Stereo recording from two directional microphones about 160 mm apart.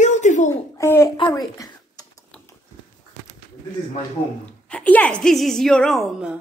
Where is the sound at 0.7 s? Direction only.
15° left (ahead or behind).